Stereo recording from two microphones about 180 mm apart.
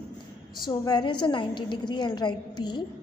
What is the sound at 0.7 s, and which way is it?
A woman's voice, 25° left (ahead or behind).